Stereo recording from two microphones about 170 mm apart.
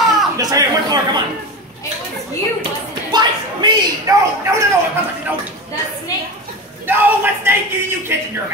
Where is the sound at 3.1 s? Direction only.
25° right (ahead or behind).